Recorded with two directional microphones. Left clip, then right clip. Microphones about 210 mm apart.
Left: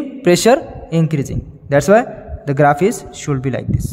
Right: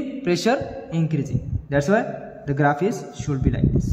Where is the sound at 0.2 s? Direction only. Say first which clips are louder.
Left 10 dB; 50° left (ahead or behind).